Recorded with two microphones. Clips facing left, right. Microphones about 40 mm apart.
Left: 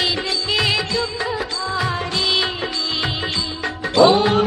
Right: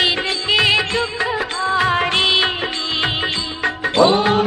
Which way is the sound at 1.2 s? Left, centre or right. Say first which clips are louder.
Right 3 dB; right.